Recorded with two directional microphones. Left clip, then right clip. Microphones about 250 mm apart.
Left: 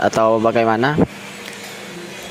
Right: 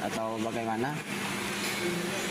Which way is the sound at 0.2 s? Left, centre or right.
Left.